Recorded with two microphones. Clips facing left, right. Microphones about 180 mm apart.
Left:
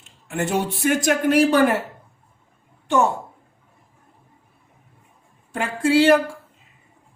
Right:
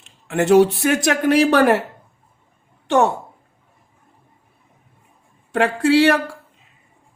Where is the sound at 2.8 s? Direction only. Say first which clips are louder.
Right 3 dB; 70° right (ahead or behind).